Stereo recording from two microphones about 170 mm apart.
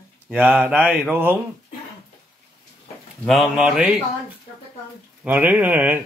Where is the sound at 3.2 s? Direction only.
Centre (ahead or behind).